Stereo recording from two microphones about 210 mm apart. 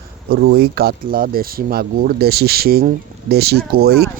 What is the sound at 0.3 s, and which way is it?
Speech, 50° right (ahead or behind).